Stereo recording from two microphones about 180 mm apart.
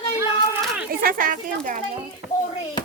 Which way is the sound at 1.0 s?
50° right (ahead or behind).